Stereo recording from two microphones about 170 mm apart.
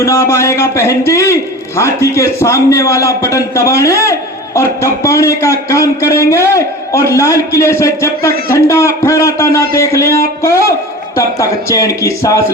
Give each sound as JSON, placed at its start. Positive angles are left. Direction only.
{"t": 0.0, "sound": "a man's voice", "side_deg": 15}